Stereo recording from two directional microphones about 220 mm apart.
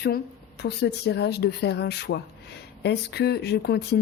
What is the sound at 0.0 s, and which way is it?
A woman's voice, 50° left (ahead or behind).